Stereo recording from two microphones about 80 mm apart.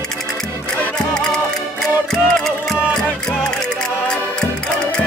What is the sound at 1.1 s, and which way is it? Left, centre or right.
Music, centre.